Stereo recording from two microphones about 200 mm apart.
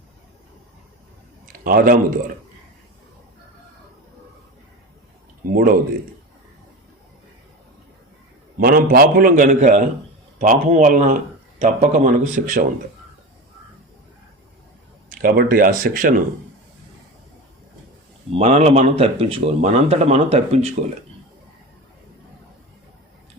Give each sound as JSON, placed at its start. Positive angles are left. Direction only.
{"t": 1.6, "sound": "a man's voice", "side_deg": -45}
{"t": 5.5, "sound": "a man's voice", "side_deg": -45}
{"t": 8.5, "sound": "a man's voice", "side_deg": -45}
{"t": 15.1, "sound": "a man's voice", "side_deg": -45}
{"t": 18.3, "sound": "speech", "side_deg": -30}